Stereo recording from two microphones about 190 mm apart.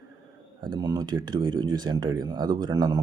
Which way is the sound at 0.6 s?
20° right (ahead or behind).